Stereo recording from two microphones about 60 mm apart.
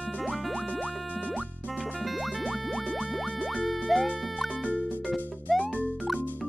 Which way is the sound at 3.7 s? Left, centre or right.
Centre.